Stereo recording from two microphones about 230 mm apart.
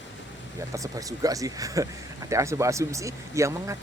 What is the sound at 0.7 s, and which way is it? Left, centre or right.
Speech, centre.